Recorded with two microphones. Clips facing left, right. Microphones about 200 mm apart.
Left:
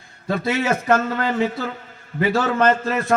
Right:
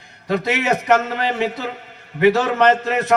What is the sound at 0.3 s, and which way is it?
A man's voice, 20° right (ahead or behind).